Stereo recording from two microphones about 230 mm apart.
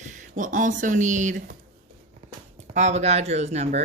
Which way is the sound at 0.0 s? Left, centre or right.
Right.